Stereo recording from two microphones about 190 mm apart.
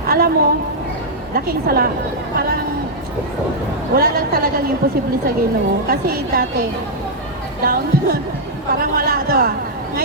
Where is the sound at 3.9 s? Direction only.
55° right (ahead or behind).